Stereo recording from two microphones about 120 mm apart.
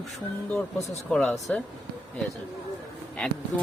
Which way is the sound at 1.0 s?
5° left (ahead or behind).